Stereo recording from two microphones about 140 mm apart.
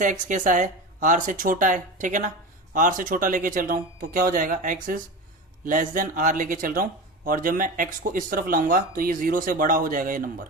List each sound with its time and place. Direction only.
0.0 s speech: 65° right (ahead or behind); by 10.4 s 85° right